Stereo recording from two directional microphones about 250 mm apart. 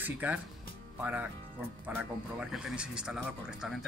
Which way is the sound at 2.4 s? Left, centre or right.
Centre.